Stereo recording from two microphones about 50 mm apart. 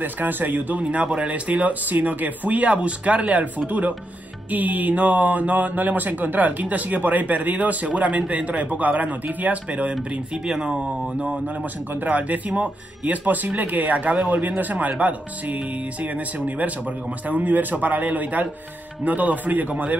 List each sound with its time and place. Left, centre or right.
0.0 s speech: right
10.3 s speech: centre
11.9 s speech: right